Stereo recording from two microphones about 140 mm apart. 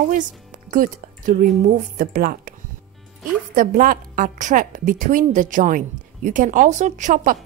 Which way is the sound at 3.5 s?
75° right (ahead or behind).